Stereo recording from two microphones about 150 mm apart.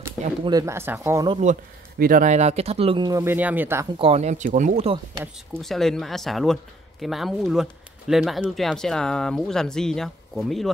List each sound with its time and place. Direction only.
0.0 s speech: 20° right (ahead or behind)
1.5 s speech: 50° right (ahead or behind)
2.0 s speech: 65° right (ahead or behind); by 3.1 s 40° right (ahead or behind)
3.1 s speech: 20° right (ahead or behind)
4.0 s speech: 45° right (ahead or behind)
5.6 s speech: centre (ahead or behind)